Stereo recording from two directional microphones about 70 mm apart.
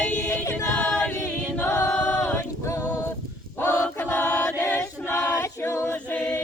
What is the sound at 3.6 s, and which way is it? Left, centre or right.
Choir, left.